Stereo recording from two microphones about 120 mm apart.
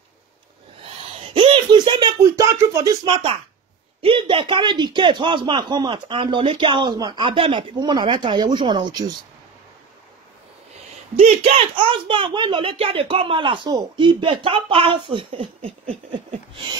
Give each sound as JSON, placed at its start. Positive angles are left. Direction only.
{"t": 1.2, "sound": "speech", "side_deg": -50}
{"t": 11.1, "sound": "speech", "side_deg": -60}